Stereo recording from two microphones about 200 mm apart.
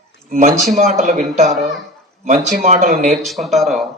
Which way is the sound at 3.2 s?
Centre (ahead or behind).